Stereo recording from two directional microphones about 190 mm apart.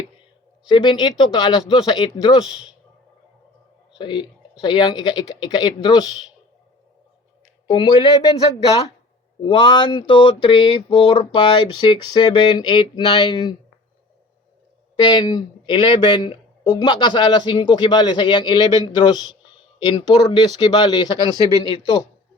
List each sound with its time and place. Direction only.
0.7 s speech: 25° left (ahead or behind)
2.5 s speech: 5° right (ahead or behind)
3.9 s speech: 25° left (ahead or behind)
7.7 s speech: 20° left (ahead or behind)
9.4 s speech: 25° left (ahead or behind)
15.0 s speech: 20° left (ahead or behind)